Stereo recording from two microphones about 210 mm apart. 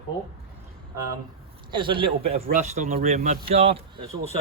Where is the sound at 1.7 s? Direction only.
25° right (ahead or behind).